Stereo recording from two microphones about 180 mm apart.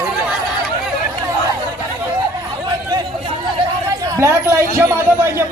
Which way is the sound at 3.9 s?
20° right (ahead or behind).